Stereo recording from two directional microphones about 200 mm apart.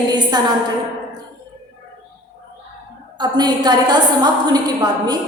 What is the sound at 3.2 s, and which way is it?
A woman's voice, 20° right (ahead or behind).